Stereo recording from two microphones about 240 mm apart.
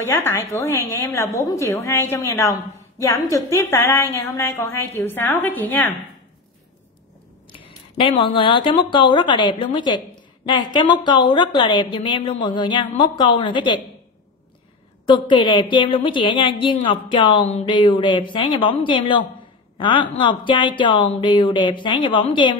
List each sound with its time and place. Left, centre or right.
0.0 s a woman's voice: centre
7.5 s a woman's voice: left
15.0 s a woman's voice: centre